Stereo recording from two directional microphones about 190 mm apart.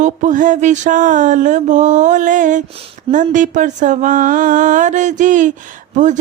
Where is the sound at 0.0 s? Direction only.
40° right (ahead or behind).